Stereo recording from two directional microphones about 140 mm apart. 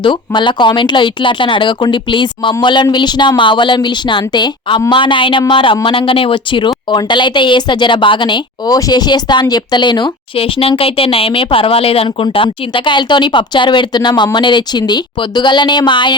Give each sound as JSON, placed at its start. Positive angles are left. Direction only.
{"t": 0.0, "sound": "a woman's voice", "side_deg": 35}